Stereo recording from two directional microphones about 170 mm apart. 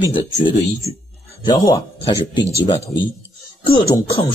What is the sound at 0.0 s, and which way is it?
Speech, 30° left (ahead or behind).